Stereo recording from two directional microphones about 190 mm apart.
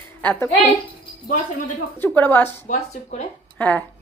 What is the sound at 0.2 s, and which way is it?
Speech, 10° left (ahead or behind).